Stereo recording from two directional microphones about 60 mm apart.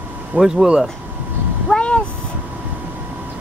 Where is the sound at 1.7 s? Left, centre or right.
Centre.